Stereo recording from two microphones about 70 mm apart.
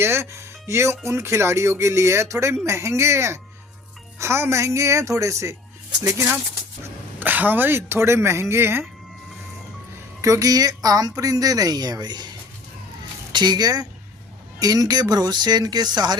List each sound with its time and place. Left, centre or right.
0.0 s speech: right
7.2 s speech: right
10.2 s speech: right
13.3 s speech: right